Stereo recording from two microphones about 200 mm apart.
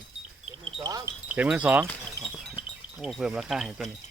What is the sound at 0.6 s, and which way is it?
Wind chime, 20° right (ahead or behind).